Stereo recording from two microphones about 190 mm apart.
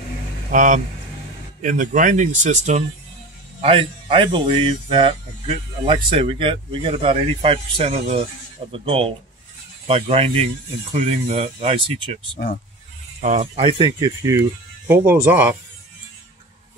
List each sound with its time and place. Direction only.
0.5 s speech: 45° right (ahead or behind)
3.6 s speech: 30° right (ahead or behind)
13.2 s speech: 40° right (ahead or behind)
13.7 s speech: 25° right (ahead or behind)